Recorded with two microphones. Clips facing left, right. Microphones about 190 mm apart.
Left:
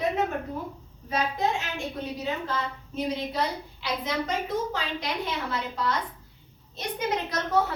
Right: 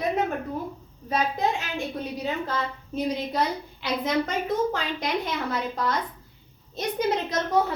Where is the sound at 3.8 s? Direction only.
55° right (ahead or behind).